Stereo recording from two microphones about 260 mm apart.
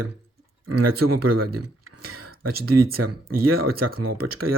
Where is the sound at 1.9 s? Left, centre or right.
Right.